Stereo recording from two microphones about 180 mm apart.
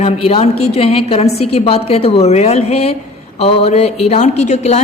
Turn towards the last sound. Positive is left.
turn(degrees=40)  # may be behind; listen again after turning